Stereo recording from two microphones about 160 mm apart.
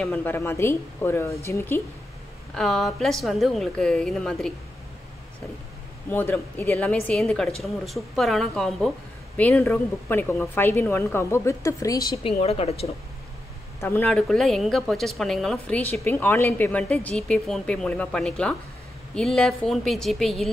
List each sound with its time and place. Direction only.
0.0 s speech: 10° left (ahead or behind)
2.5 s speech: centre (ahead or behind)
6.0 s speech: 10° left (ahead or behind)
12.2 s a woman's voice: 40° left (ahead or behind)
13.7 s speech: 15° left (ahead or behind)